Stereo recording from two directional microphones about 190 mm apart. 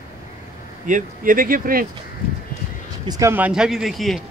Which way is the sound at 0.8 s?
45° right (ahead or behind).